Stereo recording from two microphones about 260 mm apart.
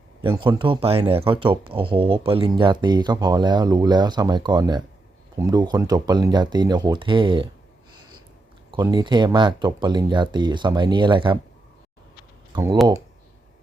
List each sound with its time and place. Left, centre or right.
0.2 s speech: centre
8.7 s speech: centre
12.5 s speech: centre